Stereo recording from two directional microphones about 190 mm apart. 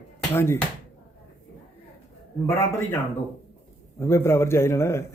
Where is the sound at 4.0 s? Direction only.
15° left (ahead or behind).